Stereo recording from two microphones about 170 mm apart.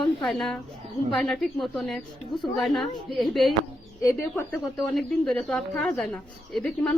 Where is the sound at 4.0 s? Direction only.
15° left (ahead or behind).